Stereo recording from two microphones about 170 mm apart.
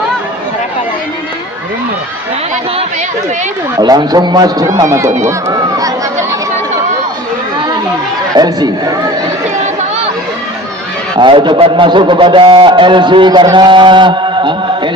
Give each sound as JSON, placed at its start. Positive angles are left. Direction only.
{"t": 3.8, "sound": "a man's voice", "side_deg": -25}
{"t": 8.4, "sound": "a man's voice", "side_deg": -25}
{"t": 11.2, "sound": "a man's voice", "side_deg": -30}